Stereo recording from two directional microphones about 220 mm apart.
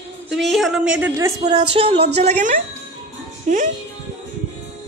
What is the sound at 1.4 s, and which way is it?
A woman's voice, 20° right (ahead or behind).